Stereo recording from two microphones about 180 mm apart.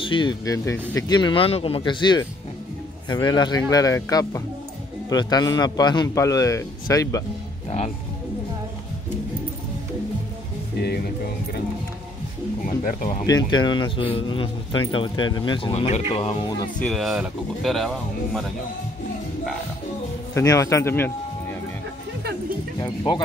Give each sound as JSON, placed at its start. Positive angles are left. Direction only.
{"t": 0.0, "sound": "a man's voice", "side_deg": 25}
{"t": 12.6, "sound": "speech", "side_deg": 45}
{"t": 13.2, "sound": "a man's voice", "side_deg": 25}
{"t": 16.8, "sound": "speech", "side_deg": 0}
{"t": 20.3, "sound": "a man's voice", "side_deg": 15}
{"t": 22.8, "sound": "a man's voice", "side_deg": 25}